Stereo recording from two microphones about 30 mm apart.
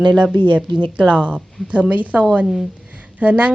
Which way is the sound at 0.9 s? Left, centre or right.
Right.